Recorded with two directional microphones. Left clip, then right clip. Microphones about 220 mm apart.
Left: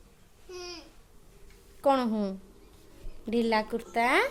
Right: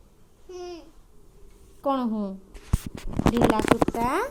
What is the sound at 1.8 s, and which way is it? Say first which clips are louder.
Speech: left 1 dB; 20° left (ahead or behind).